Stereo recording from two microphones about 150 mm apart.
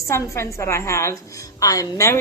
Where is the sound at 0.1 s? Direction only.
20° left (ahead or behind).